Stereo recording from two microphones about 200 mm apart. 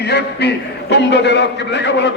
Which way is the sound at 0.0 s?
55° left (ahead or behind).